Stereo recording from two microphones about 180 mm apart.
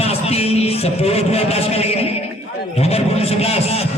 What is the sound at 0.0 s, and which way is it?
A man's voice, 35° left (ahead or behind).